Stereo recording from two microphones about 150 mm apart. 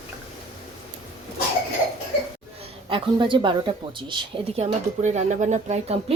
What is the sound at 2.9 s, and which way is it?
Speech, 35° right (ahead or behind).